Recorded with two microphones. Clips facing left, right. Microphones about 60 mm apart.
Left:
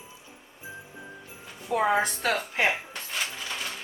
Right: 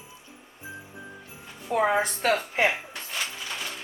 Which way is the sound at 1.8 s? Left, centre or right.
Right.